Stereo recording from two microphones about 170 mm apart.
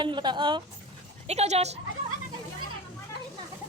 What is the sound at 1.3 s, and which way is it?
Speech, 40° right (ahead or behind).